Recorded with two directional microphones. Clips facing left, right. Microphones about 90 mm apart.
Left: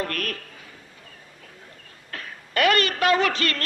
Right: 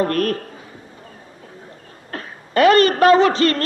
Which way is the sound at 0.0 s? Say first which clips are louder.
Right 10 dB; 35° right (ahead or behind).